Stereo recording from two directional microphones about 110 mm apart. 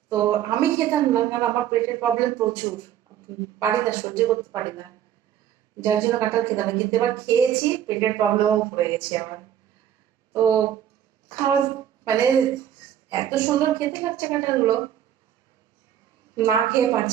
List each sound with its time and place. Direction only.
0.1 s speech: 35° right (ahead or behind)
5.8 s a woman's voice: 25° right (ahead or behind)
16.3 s speech: 30° right (ahead or behind)